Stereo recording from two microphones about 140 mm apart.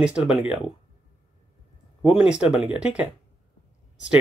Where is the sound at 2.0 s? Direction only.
5° right (ahead or behind).